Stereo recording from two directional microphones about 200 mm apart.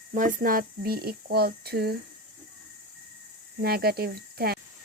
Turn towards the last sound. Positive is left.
turn(degrees=-50)  # may be behind; listen again after turning